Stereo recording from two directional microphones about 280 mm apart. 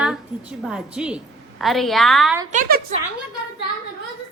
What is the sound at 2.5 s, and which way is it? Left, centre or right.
Speech, right.